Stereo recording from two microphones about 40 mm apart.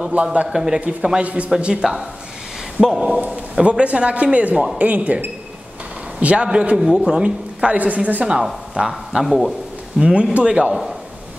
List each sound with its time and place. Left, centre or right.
0.1 s a woman's voice: right
0.5 s a man's voice: centre
3.6 s a man's voice: right
4.7 s a woman's voice: right
6.1 s a man's voice: right
6.8 s a man's voice: centre
7.2 s a woman's voice: right
8.7 s a man's voice: centre
9.2 s a man's voice: centre
9.9 s a man's voice: right